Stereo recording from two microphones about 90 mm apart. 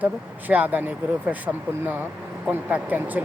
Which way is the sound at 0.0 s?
20° right (ahead or behind).